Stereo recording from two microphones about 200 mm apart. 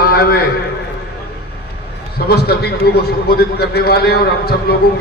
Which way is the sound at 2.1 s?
50° left (ahead or behind).